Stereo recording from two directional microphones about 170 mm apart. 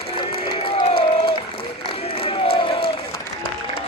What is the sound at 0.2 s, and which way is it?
Crowd, 25° left (ahead or behind).